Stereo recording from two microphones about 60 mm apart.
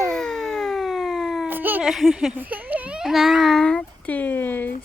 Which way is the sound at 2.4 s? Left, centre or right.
Right.